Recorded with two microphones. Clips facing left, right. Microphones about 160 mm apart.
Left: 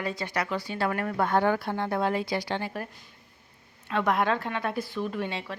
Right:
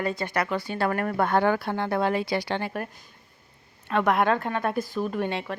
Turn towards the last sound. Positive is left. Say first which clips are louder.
# right 4 dB
turn(degrees=-55)  # may be behind; listen again after turning